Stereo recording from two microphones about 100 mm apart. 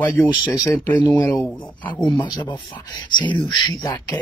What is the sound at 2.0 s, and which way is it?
Speech, 50° left (ahead or behind).